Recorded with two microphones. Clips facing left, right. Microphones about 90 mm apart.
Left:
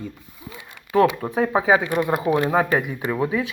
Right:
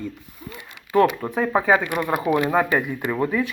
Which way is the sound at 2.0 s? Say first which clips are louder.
Left 1 dB; 25° left (ahead or behind).